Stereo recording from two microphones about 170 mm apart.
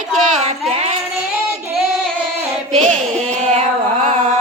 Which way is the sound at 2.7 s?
5° left (ahead or behind).